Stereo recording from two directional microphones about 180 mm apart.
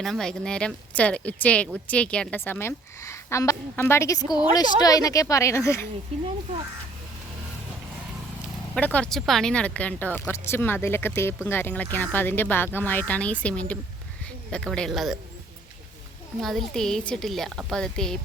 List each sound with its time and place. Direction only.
0.0 s speech: centre (ahead or behind)
8.7 s a woman's voice: 5° left (ahead or behind)
16.4 s a woman's voice: centre (ahead or behind)